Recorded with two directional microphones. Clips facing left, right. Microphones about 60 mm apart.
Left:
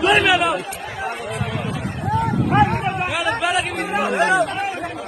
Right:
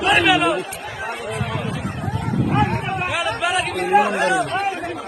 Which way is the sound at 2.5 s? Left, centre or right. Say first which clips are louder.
Left 6 dB; left.